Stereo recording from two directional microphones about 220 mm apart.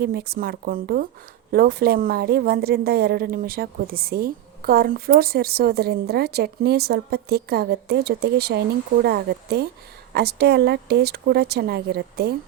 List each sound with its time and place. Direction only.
0.0 s a woman's voice: 45° right (ahead or behind)